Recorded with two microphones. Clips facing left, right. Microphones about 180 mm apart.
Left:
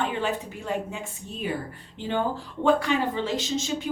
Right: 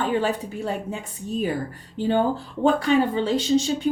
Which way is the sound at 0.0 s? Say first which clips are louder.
Right 4 dB; 40° right (ahead or behind).